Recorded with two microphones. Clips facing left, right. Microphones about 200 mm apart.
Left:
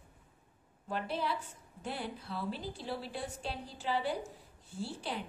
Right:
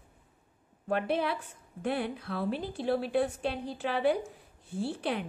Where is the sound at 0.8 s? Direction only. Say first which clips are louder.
Right 6 dB; 60° right (ahead or behind).